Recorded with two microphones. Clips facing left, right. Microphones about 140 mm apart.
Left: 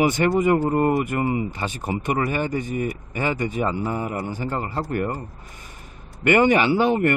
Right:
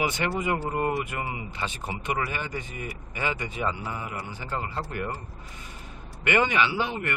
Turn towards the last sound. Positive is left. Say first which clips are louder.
# left 10 dB
turn(degrees=50)  # may be behind; listen again after turning